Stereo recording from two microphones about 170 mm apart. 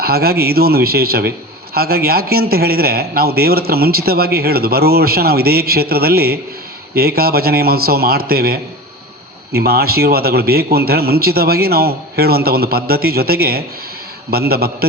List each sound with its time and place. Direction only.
0.0 s a man's voice: 65° right (ahead or behind)